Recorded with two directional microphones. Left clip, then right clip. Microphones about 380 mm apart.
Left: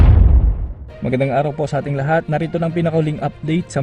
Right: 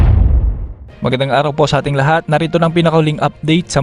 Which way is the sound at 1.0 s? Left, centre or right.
Centre.